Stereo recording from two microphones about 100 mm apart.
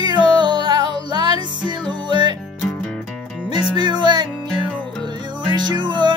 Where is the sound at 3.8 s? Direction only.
50° right (ahead or behind).